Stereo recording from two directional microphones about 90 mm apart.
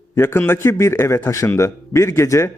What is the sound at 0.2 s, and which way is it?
A man's voice, 25° left (ahead or behind).